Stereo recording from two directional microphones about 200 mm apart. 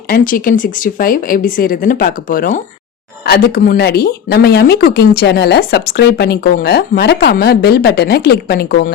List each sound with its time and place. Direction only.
0.1 s speech: 45° left (ahead or behind)